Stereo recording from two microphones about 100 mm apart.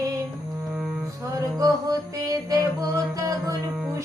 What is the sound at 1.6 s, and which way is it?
Music, 35° right (ahead or behind).